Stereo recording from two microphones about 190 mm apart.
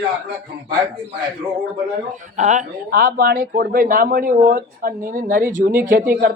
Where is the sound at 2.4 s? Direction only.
40° right (ahead or behind).